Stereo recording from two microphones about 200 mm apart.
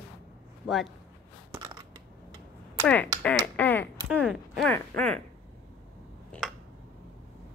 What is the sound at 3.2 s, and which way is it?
Finger snapping, 10° left (ahead or behind).